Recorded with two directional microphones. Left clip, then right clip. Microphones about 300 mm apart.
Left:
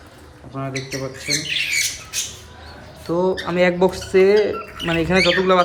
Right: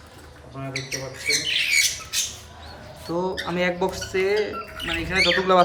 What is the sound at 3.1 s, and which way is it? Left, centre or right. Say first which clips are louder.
Speech: left 6 dB; centre.